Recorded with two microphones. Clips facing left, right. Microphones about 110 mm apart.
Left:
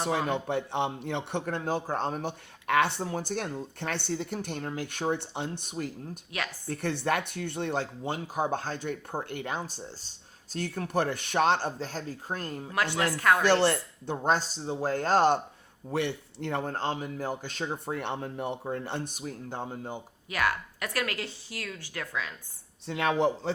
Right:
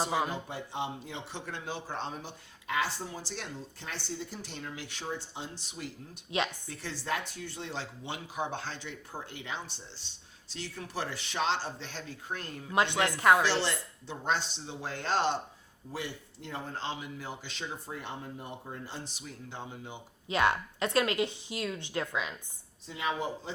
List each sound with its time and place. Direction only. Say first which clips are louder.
0.3 s a man's voice: left 8 dB; 65° left (ahead or behind); by 5.9 s 50° left (ahead or behind)
6.3 s a woman's voice: right 4 dB; 25° right (ahead or behind)
6.7 s speech: left 7 dB; 60° left (ahead or behind); by 12.7 s 40° left (ahead or behind)
12.7 s a woman's voice: right 1 dB; 20° right (ahead or behind)
13.4 s speech: left 6 dB; 50° left (ahead or behind)
15.9 s speech: left 9 dB; 70° left (ahead or behind); by 17.9 s 50° left (ahead or behind)
17.9 s a man's voice: left 7 dB; 70° left (ahead or behind); by 20.0 s 45° left (ahead or behind)
20.2 s a woman's voice: right 2 dB; 25° right (ahead or behind)
22.9 s speech: left 8 dB; 70° left (ahead or behind)